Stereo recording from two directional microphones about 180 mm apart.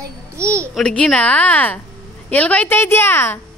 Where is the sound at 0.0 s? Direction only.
15° right (ahead or behind).